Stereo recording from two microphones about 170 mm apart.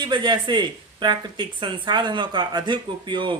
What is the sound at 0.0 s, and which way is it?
Speech, 25° right (ahead or behind).